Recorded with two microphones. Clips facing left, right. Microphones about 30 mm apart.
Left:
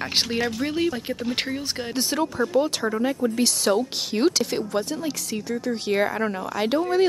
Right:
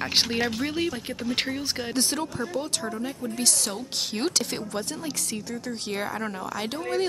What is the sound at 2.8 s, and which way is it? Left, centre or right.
Speech, left.